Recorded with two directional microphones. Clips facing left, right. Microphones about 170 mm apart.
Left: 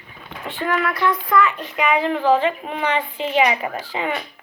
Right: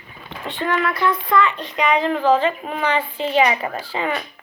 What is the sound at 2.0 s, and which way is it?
A woman's voice, 15° left (ahead or behind).